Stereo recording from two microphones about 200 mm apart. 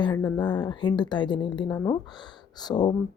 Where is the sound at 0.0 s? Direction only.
20° left (ahead or behind).